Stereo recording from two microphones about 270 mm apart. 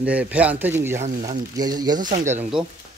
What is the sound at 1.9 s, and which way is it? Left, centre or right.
Speech, right.